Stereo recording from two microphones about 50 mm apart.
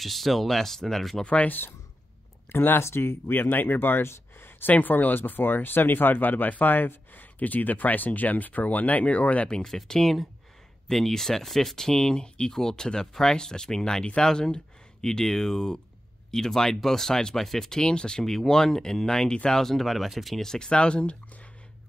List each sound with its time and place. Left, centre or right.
0.0 s speech: centre
1.2 s speech: left
2.5 s speech: left
2.8 s speech: left
4.1 s a sound: left
4.7 s speech: left
9.6 s speech: centre
19.6 s speech: centre; by 21.2 s left